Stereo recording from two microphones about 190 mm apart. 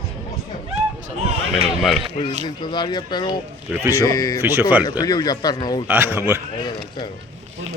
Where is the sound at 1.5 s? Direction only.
Centre (ahead or behind).